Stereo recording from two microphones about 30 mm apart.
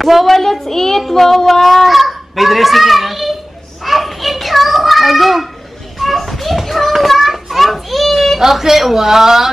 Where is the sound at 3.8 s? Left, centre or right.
Centre.